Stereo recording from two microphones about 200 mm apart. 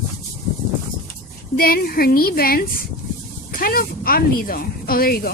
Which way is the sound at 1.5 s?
50° left (ahead or behind).